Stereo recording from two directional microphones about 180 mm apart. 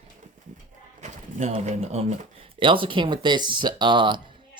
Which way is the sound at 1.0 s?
40° right (ahead or behind).